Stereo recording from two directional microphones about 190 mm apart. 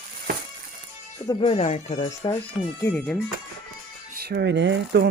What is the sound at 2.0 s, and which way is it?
Speech, 20° left (ahead or behind).